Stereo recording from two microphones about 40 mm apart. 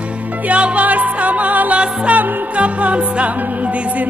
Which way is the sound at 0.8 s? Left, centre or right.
Right.